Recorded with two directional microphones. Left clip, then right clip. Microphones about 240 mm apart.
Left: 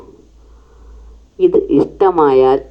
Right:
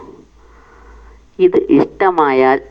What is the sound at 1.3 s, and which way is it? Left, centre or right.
Speech, right.